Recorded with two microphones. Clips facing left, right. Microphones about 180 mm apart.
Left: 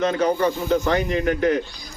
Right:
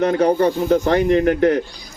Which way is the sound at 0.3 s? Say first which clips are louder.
Right 4 dB; 40° right (ahead or behind).